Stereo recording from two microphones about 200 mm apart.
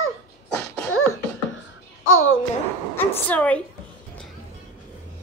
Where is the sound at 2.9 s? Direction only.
10° left (ahead or behind).